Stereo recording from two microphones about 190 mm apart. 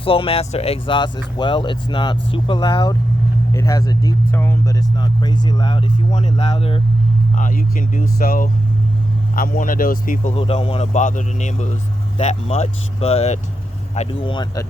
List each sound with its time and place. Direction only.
0.0 s speech: 30° left (ahead or behind)
6.3 s speech: 25° left (ahead or behind)
7.3 s speech: 45° left (ahead or behind)
10.3 s a man's voice: 30° left (ahead or behind)